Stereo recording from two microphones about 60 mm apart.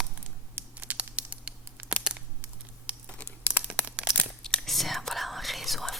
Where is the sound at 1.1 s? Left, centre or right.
Right.